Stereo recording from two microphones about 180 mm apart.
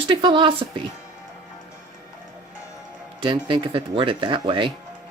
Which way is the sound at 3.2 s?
25° right (ahead or behind).